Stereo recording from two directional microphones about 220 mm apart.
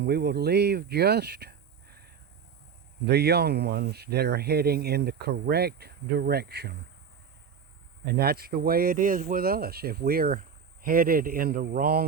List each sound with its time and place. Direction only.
0.0 s speech: 45° right (ahead or behind)
3.1 s speech: 45° right (ahead or behind)
8.2 s a man's voice: 45° right (ahead or behind)